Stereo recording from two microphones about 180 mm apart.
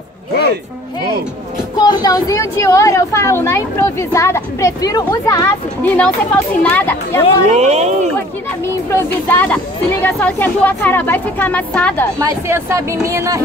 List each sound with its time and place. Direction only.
1.8 s a woman's voice: 25° left (ahead or behind)
5.8 s a woman's voice: 10° left (ahead or behind)
7.4 s speech: 35° right (ahead or behind)
9.3 s a woman's voice: 10° left (ahead or behind)
12.2 s speech: 15° right (ahead or behind)